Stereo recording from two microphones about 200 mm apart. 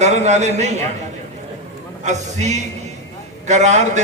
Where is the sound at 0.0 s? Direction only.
35° right (ahead or behind).